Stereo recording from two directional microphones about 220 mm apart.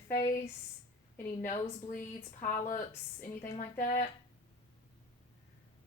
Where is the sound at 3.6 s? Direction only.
35° left (ahead or behind).